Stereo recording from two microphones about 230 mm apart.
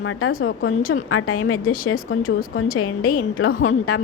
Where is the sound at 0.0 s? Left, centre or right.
Left.